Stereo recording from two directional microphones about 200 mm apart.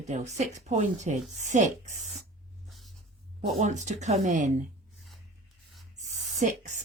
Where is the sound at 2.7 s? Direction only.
Centre (ahead or behind).